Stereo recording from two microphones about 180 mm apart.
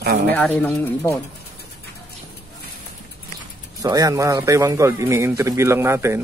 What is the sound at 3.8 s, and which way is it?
A man's voice, 20° right (ahead or behind).